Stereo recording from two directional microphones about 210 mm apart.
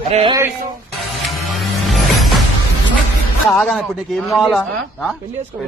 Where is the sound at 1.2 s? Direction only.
Centre (ahead or behind).